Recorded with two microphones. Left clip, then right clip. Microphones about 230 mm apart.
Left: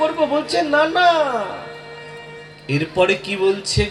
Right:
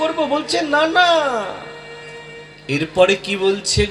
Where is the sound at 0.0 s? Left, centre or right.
Centre.